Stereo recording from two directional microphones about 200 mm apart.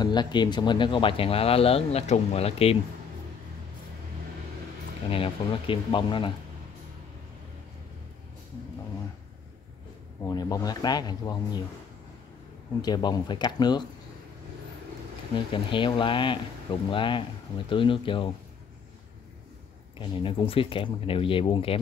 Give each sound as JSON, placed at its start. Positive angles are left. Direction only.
{"t": 0.0, "sound": "speech", "side_deg": 20}
{"t": 5.1, "sound": "speech", "side_deg": 25}
{"t": 10.2, "sound": "speech", "side_deg": 20}
{"t": 12.8, "sound": "speech", "side_deg": 20}
{"t": 15.3, "sound": "speech", "side_deg": 25}
{"t": 20.0, "sound": "speech", "side_deg": 25}